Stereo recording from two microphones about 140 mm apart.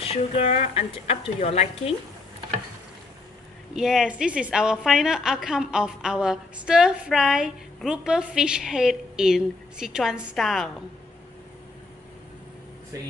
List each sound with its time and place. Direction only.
0.0 s a woman's voice: 45° left (ahead or behind)
3.7 s a woman's voice: 5° right (ahead or behind)
12.9 s speech: 25° right (ahead or behind)